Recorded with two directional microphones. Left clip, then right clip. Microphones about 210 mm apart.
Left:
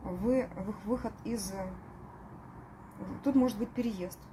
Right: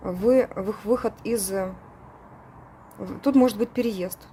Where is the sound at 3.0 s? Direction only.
50° right (ahead or behind).